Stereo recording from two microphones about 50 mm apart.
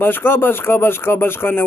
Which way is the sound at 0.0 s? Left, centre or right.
Left.